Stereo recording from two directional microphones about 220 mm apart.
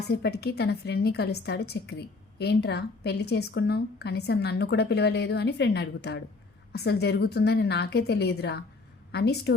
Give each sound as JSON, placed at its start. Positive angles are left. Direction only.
{"t": 0.1, "sound": "a woman's voice", "side_deg": 45}